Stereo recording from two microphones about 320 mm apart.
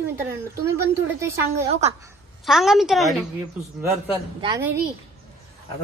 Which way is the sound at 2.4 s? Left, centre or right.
Centre.